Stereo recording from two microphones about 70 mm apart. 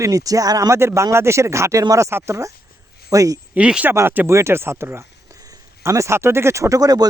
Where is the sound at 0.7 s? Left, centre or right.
Right.